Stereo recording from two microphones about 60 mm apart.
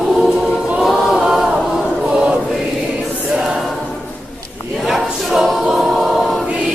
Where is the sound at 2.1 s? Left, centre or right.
Centre.